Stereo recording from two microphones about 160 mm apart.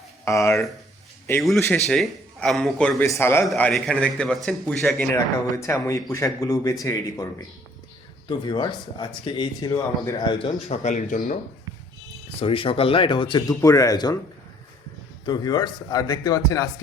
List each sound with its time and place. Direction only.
0.3 s speech: 15° left (ahead or behind)
1.9 s a man's voice: centre (ahead or behind)
3.6 s a man's voice: 5° left (ahead or behind)
5.1 s speech: 15° left (ahead or behind)
8.3 s speech: 25° left (ahead or behind); by 11.3 s 55° left (ahead or behind)
12.4 s speech: 35° left (ahead or behind)
15.3 s speech: 25° left (ahead or behind)